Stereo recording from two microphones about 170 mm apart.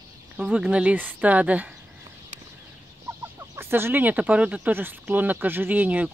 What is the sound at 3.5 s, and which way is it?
Speech, 15° right (ahead or behind).